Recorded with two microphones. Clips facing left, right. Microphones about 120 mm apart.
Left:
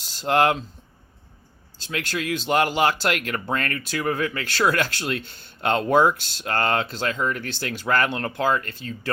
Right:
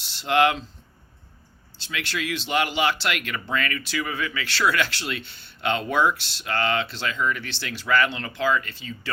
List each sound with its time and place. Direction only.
0.0 s speech: 40° left (ahead or behind)
1.8 s speech: 45° left (ahead or behind)